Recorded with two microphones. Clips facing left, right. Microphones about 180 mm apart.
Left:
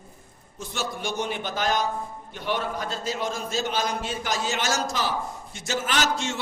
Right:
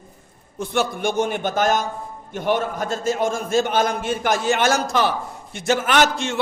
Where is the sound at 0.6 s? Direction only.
55° right (ahead or behind).